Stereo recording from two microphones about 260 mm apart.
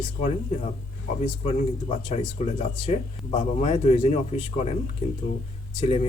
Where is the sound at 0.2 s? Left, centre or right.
Left.